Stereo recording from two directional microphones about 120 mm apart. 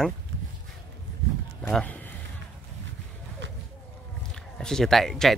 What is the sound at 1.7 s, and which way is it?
Speech, 15° left (ahead or behind).